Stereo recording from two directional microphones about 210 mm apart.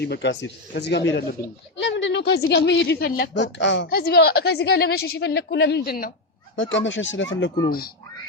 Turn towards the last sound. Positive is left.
turn(degrees=45)  # may be behind; listen again after turning